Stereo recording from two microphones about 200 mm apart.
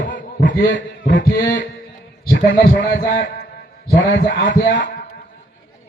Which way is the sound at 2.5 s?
60° left (ahead or behind).